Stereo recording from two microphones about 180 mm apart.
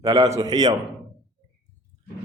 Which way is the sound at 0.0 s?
20° right (ahead or behind).